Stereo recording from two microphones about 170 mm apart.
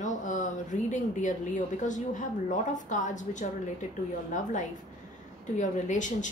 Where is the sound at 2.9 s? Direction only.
45° left (ahead or behind).